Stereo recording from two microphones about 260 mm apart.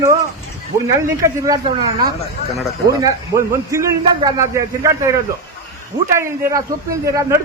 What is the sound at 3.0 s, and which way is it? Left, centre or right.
A man's voice, centre.